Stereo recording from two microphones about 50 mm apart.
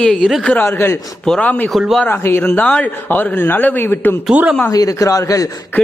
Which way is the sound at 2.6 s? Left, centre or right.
Centre.